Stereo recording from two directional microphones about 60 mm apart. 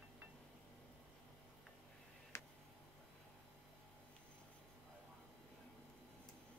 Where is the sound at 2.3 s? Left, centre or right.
Left.